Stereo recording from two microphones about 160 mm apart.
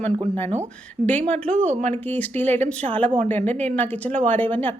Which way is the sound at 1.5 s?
45° right (ahead or behind).